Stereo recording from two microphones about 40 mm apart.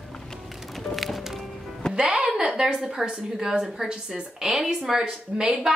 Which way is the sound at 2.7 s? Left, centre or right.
Centre.